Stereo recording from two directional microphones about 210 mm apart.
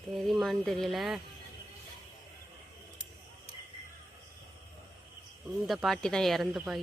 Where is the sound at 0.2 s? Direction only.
Centre (ahead or behind).